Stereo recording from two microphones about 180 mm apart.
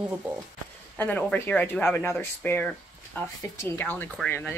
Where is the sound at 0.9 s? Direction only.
10° left (ahead or behind).